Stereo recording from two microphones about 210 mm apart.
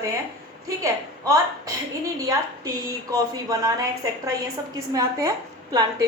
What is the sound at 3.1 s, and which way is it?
Speech, 15° right (ahead or behind).